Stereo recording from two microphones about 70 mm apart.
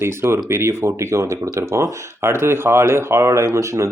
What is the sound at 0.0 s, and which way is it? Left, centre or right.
Speech, right.